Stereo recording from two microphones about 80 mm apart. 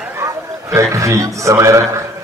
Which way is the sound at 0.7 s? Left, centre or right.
Right.